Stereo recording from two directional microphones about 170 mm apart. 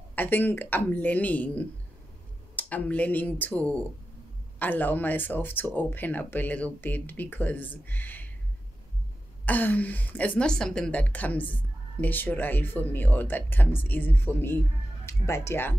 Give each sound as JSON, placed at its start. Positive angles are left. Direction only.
{"t": 0.1, "sound": "speech", "side_deg": 10}
{"t": 9.5, "sound": "speech", "side_deg": 10}